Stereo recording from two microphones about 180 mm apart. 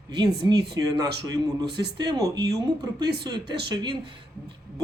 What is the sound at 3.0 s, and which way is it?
Speech, 65° right (ahead or behind).